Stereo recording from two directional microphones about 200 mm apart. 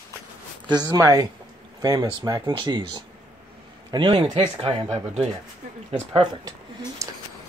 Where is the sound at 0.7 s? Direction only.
20° right (ahead or behind).